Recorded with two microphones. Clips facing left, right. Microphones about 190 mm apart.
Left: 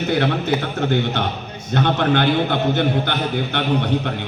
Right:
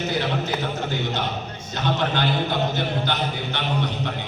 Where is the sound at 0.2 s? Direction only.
60° left (ahead or behind).